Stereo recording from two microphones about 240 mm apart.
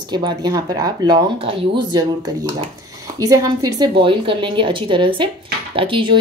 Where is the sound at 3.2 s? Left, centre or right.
Centre.